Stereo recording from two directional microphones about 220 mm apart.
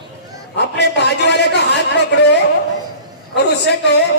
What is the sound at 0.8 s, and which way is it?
A man's voice, 50° left (ahead or behind).